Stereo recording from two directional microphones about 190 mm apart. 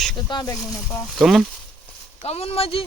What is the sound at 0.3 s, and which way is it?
Speech, 20° left (ahead or behind).